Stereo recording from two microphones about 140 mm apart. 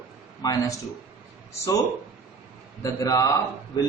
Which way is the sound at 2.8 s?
25° left (ahead or behind).